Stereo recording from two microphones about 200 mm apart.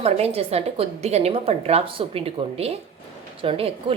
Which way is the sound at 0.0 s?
30° right (ahead or behind).